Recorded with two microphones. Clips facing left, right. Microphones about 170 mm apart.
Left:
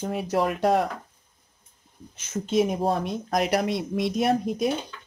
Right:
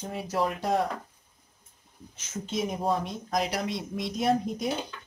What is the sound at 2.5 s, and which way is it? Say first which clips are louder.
Speech: left 5 dB; 65° left (ahead or behind).